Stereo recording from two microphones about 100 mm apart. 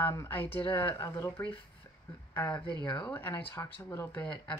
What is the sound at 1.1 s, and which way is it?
Speech, 25° left (ahead or behind).